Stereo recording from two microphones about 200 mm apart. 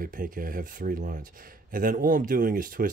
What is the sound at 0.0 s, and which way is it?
Speech, 45° right (ahead or behind).